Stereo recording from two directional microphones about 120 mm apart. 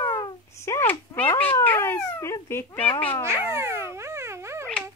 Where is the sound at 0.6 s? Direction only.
20° left (ahead or behind).